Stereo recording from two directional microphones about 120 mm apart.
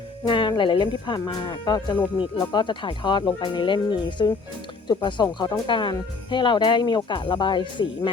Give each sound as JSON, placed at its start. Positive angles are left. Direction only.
{"t": 0.3, "sound": "speech", "side_deg": 40}